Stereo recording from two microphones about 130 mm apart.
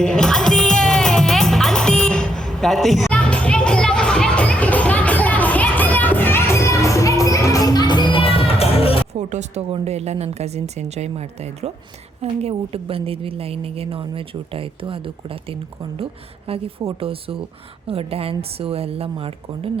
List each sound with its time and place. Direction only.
0.0 s music: 5° left (ahead or behind); by 9.0 s 50° left (ahead or behind)
9.1 s a woman's voice: 60° right (ahead or behind); by 19.8 s 45° right (ahead or behind)